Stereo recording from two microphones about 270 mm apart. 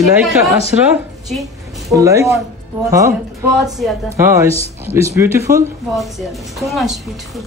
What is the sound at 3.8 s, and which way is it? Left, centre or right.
A woman's voice, centre.